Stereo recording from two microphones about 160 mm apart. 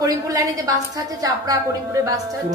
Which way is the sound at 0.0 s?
20° right (ahead or behind).